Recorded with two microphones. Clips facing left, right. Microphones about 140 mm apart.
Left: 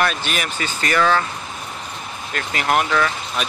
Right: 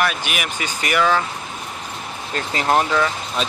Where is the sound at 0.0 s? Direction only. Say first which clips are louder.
Left 1 dB; 10° right (ahead or behind).